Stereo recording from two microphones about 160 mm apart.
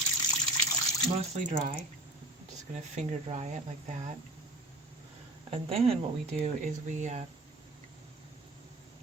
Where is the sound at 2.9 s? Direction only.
45° right (ahead or behind).